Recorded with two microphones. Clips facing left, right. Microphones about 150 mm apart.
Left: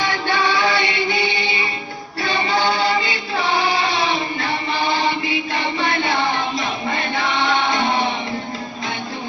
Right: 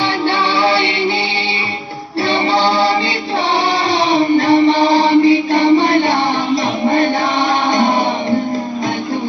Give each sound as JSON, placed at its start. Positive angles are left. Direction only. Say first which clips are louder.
{"t": 0.3, "sound": "music", "louder": "right 4 dB", "side_deg": -30}
{"t": 2.3, "sound": "music", "louder": "right 5 dB", "side_deg": -35}